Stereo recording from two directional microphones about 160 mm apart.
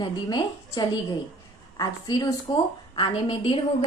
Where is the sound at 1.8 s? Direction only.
25° left (ahead or behind).